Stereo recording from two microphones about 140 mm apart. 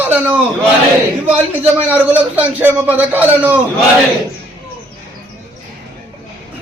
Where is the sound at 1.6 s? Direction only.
10° right (ahead or behind).